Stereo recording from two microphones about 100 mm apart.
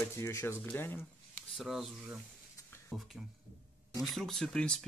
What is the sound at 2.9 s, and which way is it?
Speech, 5° right (ahead or behind).